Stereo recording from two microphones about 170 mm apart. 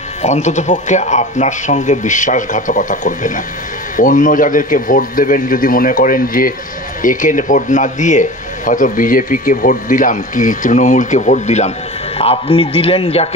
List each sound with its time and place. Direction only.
0.2 s a man's voice: 45° left (ahead or behind)